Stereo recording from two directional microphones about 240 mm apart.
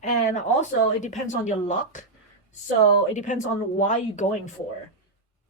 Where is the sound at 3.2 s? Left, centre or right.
Left.